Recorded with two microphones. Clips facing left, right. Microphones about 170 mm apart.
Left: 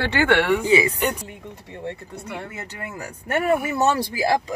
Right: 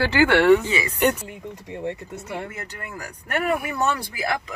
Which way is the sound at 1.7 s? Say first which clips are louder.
Right 2 dB; 15° right (ahead or behind).